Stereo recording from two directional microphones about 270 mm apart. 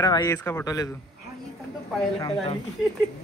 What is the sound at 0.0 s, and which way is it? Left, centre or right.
Speech, centre.